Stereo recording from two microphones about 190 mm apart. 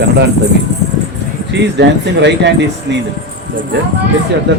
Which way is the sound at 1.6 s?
65° right (ahead or behind).